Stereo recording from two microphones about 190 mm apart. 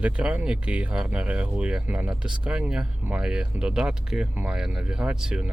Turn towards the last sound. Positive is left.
turn(degrees=-5)  # may be behind; listen again after turning